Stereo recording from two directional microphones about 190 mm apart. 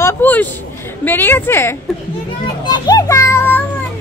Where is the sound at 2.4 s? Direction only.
20° left (ahead or behind).